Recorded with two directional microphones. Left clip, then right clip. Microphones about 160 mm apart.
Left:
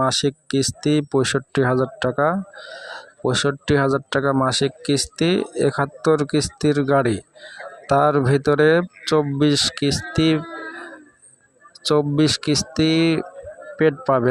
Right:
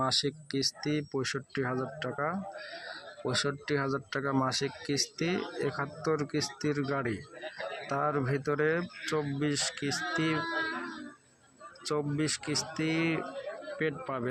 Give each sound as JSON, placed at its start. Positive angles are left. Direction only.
{"t": 0.0, "sound": "speech", "side_deg": 45}
{"t": 11.8, "sound": "speech", "side_deg": 50}